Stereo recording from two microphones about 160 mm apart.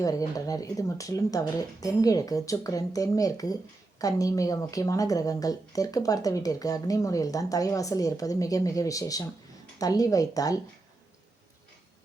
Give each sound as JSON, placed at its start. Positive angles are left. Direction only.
{"t": 0.0, "sound": "speech", "side_deg": 20}